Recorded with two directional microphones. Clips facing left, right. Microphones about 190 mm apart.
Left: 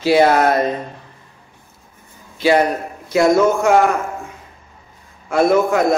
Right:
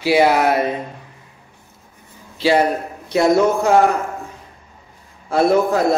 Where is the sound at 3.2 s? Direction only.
30° right (ahead or behind).